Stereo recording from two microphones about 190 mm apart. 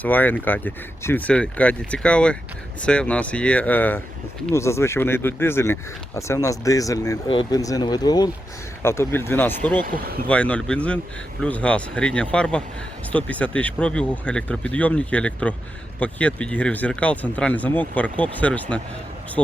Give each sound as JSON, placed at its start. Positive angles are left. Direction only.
{"t": 0.0, "sound": "speech", "side_deg": 10}
{"t": 9.8, "sound": "speech", "side_deg": -50}
{"t": 10.2, "sound": "speech", "side_deg": 5}